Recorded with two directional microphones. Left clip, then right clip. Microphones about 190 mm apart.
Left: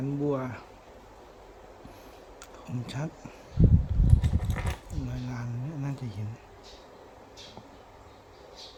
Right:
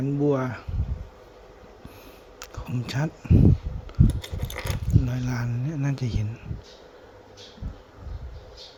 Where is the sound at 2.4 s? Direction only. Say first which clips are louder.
Right 6 dB; 30° right (ahead or behind).